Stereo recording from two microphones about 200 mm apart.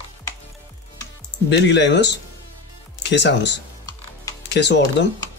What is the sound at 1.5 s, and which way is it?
Speech, 60° left (ahead or behind).